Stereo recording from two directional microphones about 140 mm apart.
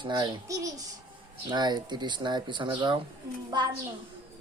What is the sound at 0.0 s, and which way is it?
Speech, 35° right (ahead or behind).